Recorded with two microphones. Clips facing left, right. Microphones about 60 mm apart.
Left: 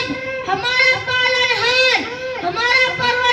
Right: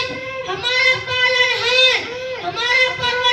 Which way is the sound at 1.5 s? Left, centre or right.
Left.